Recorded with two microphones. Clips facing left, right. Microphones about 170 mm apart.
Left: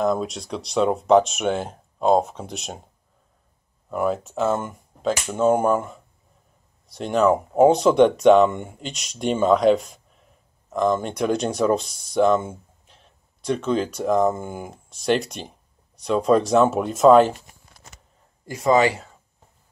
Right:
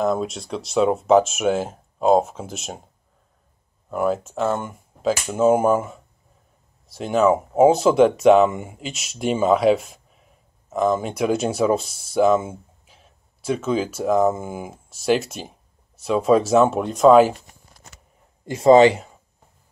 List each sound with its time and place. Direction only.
0.0 s speech: centre (ahead or behind)
3.9 s speech: centre (ahead or behind)
18.4 s speech: 25° right (ahead or behind)